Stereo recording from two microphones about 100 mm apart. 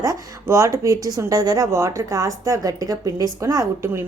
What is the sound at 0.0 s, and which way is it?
A woman's voice, 30° right (ahead or behind).